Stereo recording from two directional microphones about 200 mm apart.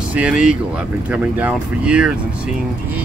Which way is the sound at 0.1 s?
5° right (ahead or behind).